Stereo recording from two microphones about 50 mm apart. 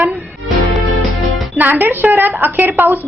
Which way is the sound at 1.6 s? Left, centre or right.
Right.